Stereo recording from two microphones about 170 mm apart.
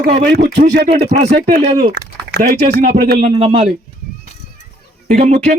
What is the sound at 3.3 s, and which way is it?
Speech, 35° right (ahead or behind).